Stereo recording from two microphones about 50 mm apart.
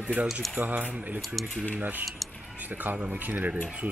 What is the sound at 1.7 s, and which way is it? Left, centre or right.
Speech, right.